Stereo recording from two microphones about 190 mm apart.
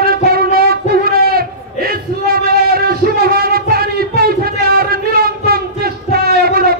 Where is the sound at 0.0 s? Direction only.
50° right (ahead or behind).